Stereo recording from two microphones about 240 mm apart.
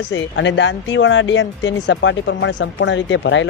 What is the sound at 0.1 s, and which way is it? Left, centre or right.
Speech, left.